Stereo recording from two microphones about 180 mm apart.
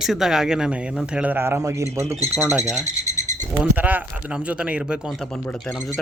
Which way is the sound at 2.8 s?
40° right (ahead or behind).